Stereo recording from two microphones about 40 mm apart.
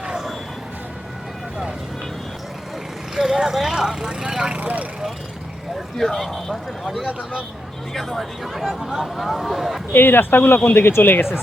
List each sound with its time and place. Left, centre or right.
3.2 s speech: centre
4.5 s vehicle: right
6.1 s speech: centre
8.5 s speech: centre
9.9 s speech: left